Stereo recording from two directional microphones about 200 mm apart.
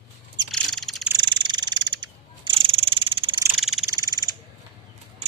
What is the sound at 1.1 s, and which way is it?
Frog, 25° right (ahead or behind).